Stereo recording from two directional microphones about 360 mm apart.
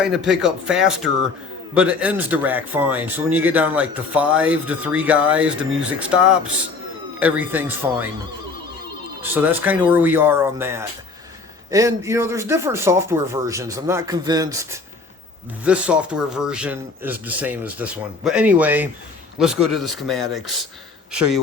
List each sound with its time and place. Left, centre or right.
0.0 s a man's voice: centre
9.2 s a man's voice: centre